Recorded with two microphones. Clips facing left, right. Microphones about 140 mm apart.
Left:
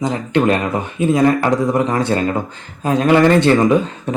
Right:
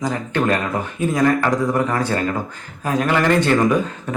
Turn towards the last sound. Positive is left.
turn(degrees=20)  # may be behind; listen again after turning